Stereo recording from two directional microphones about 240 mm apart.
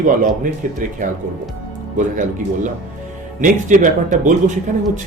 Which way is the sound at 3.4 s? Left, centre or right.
Right.